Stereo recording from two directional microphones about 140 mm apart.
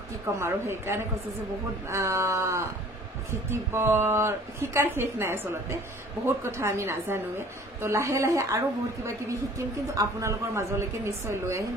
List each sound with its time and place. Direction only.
0.4 s a woman's voice: 20° right (ahead or behind)